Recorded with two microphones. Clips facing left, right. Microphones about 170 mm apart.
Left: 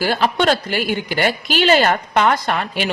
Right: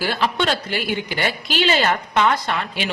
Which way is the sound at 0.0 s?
45° left (ahead or behind).